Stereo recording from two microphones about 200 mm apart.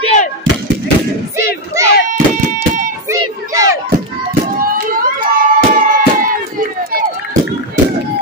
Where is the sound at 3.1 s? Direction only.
15° right (ahead or behind).